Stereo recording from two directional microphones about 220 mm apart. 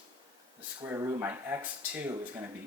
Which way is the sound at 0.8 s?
15° right (ahead or behind).